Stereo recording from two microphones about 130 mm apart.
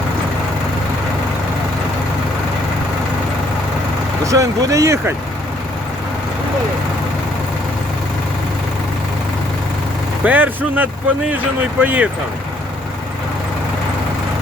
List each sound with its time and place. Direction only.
4.2 s speech: 25° right (ahead or behind)
10.2 s speech: 10° right (ahead or behind)